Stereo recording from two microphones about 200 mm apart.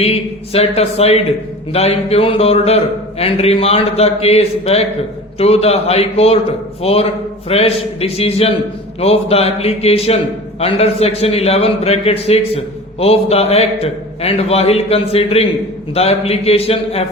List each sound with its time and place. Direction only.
0.0 s a man's voice: 30° left (ahead or behind)